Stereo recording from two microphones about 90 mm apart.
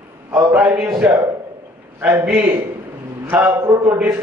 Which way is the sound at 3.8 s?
15° right (ahead or behind).